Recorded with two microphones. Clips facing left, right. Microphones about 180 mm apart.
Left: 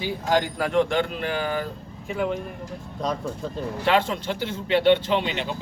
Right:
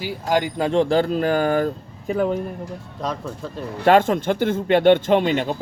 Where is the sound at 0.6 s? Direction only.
30° right (ahead or behind).